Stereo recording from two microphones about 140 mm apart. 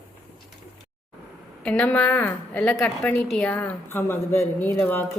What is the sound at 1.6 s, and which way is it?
Speech, 10° left (ahead or behind).